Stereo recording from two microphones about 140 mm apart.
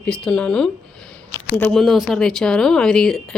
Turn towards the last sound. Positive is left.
turn(degrees=5)  # may be behind; listen again after turning